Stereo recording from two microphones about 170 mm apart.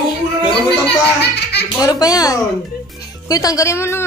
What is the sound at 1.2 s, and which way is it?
Speech, 80° left.